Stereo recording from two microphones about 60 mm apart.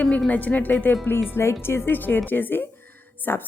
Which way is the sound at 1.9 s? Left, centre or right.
Left.